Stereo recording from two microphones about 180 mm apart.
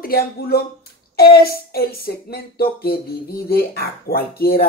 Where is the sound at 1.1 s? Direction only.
60° left (ahead or behind).